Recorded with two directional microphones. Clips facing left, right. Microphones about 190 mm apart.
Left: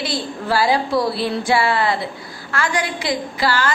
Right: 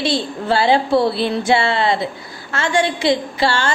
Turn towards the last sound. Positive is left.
turn(degrees=-25)  # may be behind; listen again after turning